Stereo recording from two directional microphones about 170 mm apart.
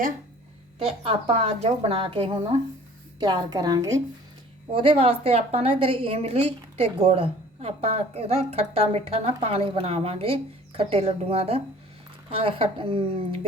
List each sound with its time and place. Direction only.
1.0 s a woman's voice: 40° right (ahead or behind)
3.2 s a woman's voice: 25° right (ahead or behind)
4.7 s a woman's voice: 30° right (ahead or behind)